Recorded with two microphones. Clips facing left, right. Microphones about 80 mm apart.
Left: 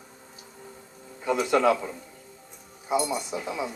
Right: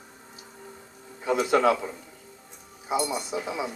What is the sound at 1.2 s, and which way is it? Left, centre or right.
Speech, right.